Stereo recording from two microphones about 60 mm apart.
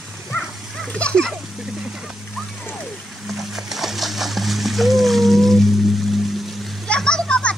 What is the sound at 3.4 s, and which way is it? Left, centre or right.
Music, centre.